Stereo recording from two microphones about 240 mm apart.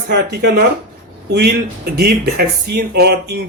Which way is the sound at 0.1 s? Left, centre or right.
Right.